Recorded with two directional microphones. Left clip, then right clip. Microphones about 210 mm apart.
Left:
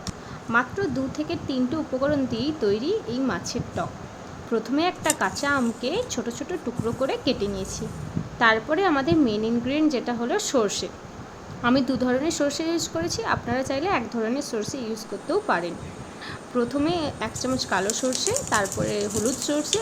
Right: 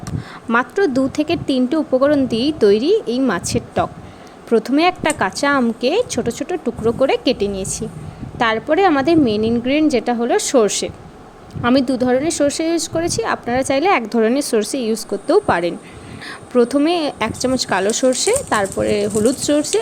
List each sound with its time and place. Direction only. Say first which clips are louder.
0.5 s a woman's voice: right 8 dB; 35° right (ahead or behind)